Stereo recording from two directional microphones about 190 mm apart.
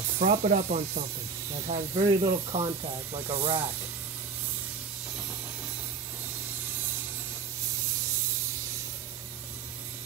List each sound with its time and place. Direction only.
0.2 s speech: 35° right (ahead or behind)